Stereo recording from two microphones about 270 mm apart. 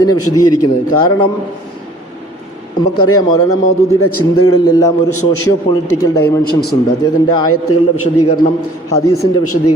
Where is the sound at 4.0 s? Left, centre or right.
Left.